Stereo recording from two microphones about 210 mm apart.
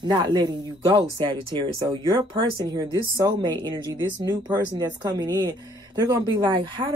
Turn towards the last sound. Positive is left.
turn(degrees=-25)  # may be behind; listen again after turning